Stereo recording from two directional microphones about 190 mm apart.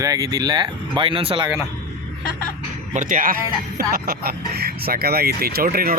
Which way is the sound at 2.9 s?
45° right (ahead or behind).